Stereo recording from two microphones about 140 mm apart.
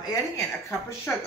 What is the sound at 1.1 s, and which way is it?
Speech, 15° left (ahead or behind).